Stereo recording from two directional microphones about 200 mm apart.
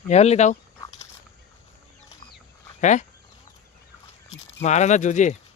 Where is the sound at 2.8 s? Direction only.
40° left (ahead or behind).